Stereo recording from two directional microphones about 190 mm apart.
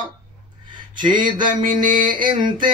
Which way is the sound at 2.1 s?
25° right (ahead or behind).